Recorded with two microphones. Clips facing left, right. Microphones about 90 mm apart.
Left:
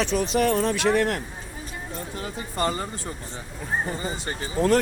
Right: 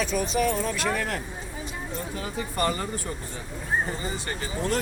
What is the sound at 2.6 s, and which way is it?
Speech, 25° left (ahead or behind).